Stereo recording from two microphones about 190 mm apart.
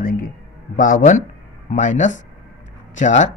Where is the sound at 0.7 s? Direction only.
45° left (ahead or behind).